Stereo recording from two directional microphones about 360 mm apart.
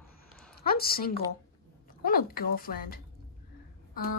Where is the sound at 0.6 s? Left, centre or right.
Left.